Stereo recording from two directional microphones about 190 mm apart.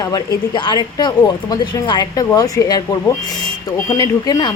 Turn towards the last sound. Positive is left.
turn(degrees=20)  # may be behind; listen again after turning